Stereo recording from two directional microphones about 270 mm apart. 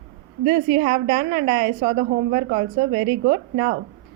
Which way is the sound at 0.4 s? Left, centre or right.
Right.